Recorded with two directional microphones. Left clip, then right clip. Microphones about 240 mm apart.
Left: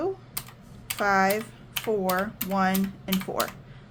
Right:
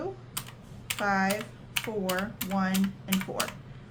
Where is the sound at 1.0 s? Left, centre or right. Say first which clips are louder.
Left 5 dB; left.